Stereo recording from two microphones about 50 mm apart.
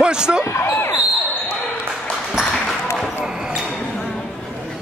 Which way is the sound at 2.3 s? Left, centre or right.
Centre.